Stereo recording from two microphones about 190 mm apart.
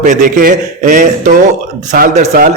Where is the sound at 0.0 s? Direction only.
40° right (ahead or behind).